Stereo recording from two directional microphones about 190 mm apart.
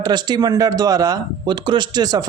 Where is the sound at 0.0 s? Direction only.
25° right (ahead or behind).